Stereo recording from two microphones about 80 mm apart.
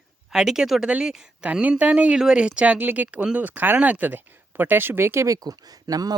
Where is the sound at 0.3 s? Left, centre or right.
Centre.